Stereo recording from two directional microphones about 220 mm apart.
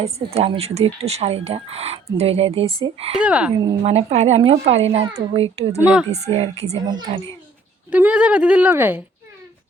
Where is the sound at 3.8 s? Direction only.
30° right (ahead or behind).